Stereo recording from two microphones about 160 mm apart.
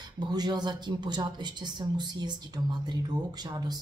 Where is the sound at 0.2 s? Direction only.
25° right (ahead or behind).